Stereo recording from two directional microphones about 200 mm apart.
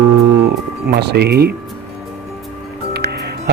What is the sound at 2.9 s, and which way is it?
Music, 55° right (ahead or behind).